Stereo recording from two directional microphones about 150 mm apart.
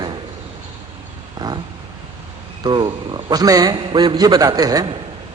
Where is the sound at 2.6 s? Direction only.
30° right (ahead or behind).